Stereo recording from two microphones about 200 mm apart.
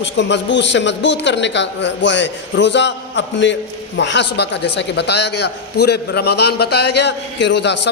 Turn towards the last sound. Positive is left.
turn(degrees=60)  # may be behind; listen again after turning